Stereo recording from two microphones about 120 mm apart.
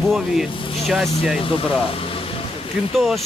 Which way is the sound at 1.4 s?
50° left (ahead or behind).